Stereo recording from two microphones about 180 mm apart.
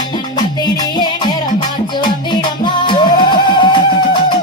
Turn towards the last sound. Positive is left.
turn(degrees=25)  # may be behind; listen again after turning